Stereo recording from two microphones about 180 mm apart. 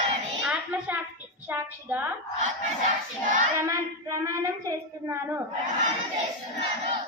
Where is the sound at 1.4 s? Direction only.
10° right (ahead or behind).